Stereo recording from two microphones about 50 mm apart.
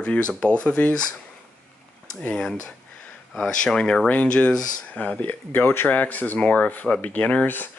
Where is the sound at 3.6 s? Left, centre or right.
Centre.